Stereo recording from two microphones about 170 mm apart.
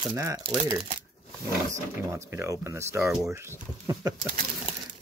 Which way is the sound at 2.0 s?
15° right (ahead or behind).